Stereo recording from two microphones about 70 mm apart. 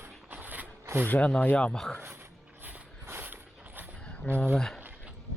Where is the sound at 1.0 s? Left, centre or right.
Centre.